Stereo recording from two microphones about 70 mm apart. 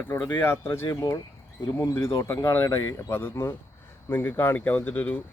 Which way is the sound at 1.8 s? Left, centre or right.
Left.